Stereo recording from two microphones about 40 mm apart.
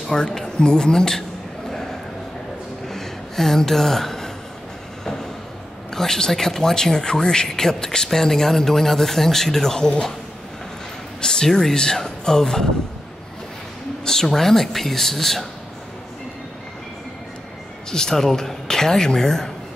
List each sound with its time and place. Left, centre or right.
0.1 s speech: centre
1.7 s a sound: centre
5.9 s speech: centre
11.1 s speech: centre
14.0 s speech: centre
17.9 s speech: centre